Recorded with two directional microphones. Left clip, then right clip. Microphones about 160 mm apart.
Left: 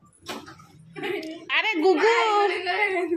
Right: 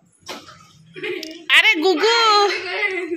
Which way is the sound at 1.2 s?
5° right (ahead or behind).